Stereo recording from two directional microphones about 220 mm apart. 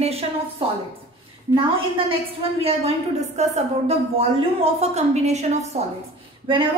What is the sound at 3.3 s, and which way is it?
A woman's voice, 30° right (ahead or behind).